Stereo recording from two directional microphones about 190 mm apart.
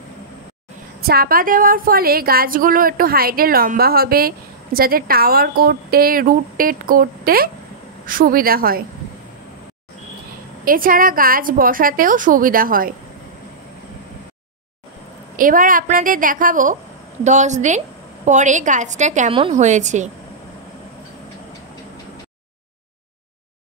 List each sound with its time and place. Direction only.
1.0 s a woman's voice: 50° right (ahead or behind)
10.6 s a woman's voice: 50° right (ahead or behind)
15.3 s a woman's voice: 45° right (ahead or behind)